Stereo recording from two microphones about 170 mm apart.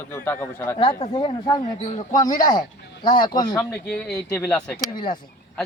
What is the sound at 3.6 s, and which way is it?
Speech, 10° left (ahead or behind).